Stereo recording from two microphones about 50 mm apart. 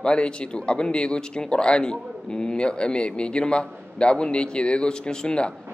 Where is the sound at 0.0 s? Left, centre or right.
Centre.